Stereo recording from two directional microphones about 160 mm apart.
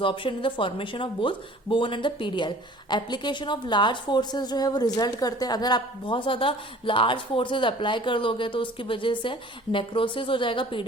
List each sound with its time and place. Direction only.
0.0 s a woman's voice: 30° left (ahead or behind)